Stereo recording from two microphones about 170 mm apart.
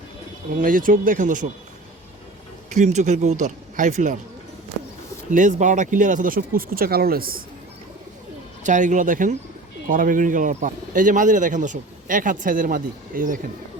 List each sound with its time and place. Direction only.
0.6 s a man's voice: 55° right (ahead or behind)
2.6 s a man's voice: 45° right (ahead or behind)
5.3 s speech: 45° right (ahead or behind)
8.6 s a man's voice: 45° right (ahead or behind)